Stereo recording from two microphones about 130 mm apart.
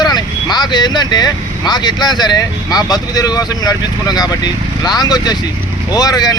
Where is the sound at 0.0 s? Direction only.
30° left (ahead or behind).